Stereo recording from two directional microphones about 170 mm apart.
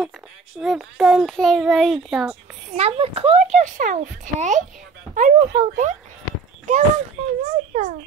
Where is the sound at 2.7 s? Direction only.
35° right (ahead or behind).